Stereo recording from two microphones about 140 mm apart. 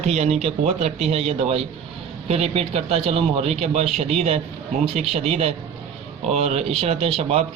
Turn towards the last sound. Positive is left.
turn(degrees=-45)  # may be behind; listen again after turning